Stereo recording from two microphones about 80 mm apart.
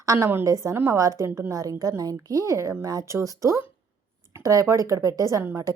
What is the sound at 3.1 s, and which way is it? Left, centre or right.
A woman's voice, right.